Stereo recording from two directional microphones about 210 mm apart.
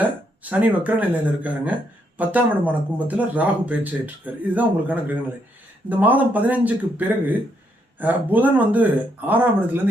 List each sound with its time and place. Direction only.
0.5 s speech: 5° right (ahead or behind)